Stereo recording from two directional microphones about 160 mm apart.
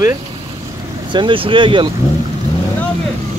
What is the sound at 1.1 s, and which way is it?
Speech, 30° right (ahead or behind).